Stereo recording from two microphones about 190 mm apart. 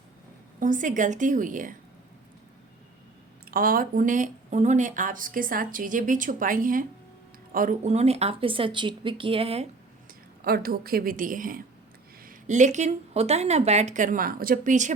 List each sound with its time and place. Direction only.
0.6 s speech: 45° right (ahead or behind)
3.5 s speech: 50° right (ahead or behind); by 9.6 s 30° right (ahead or behind)
10.4 s speech: 50° right (ahead or behind)